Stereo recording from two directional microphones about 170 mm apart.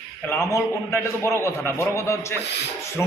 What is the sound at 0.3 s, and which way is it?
A man's voice, 15° left (ahead or behind).